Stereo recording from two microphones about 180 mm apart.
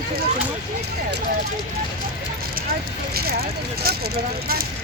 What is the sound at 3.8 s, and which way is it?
Speech, 60° right (ahead or behind).